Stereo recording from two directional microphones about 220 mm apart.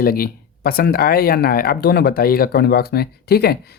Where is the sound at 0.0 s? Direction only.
45° left (ahead or behind).